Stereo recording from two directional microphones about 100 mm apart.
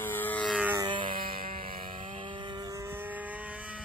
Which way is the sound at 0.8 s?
55° right (ahead or behind).